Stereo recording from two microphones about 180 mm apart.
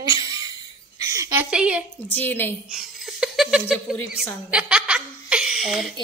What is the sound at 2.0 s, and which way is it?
Speech, 10° left (ahead or behind).